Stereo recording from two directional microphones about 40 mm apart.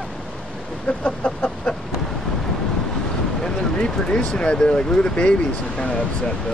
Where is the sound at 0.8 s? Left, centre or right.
Left.